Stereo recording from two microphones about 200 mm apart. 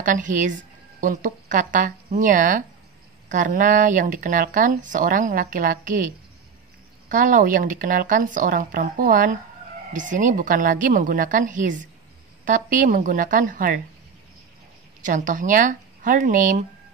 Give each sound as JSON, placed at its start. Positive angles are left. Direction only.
{"t": 0.0, "sound": "speech", "side_deg": -40}
{"t": 7.1, "sound": "speech", "side_deg": -40}
{"t": 15.0, "sound": "speech", "side_deg": -40}